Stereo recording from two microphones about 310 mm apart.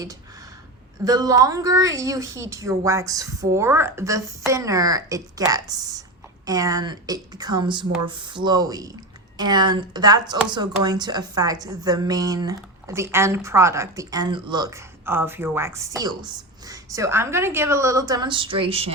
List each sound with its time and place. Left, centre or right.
1.0 s speech: centre